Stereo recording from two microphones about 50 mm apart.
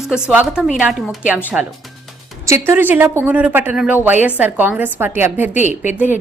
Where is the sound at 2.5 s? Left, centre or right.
Right.